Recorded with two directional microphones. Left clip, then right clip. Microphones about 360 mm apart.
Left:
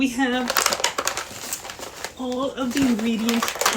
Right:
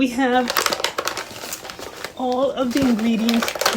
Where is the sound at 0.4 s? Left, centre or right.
Centre.